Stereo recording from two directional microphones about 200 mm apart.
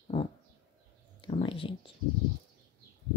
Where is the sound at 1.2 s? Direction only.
25° left (ahead or behind).